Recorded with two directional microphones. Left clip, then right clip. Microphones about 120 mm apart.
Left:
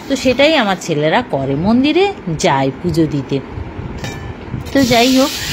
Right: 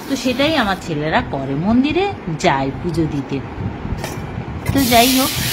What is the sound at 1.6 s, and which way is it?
Speech, 40° left (ahead or behind).